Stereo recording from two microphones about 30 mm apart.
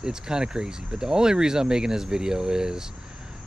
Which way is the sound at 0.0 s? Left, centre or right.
Right.